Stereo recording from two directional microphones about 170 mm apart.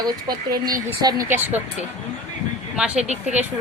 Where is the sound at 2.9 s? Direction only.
40° right (ahead or behind).